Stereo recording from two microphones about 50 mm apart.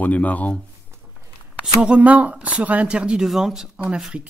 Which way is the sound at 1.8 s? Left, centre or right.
Right.